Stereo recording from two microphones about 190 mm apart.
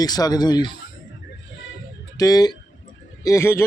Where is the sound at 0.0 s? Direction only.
20° left (ahead or behind).